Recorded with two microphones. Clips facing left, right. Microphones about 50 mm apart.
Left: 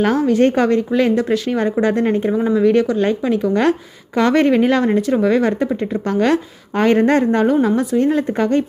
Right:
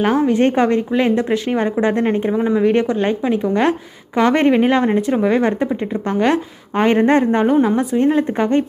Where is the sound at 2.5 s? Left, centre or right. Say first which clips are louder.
Left 2 dB; right.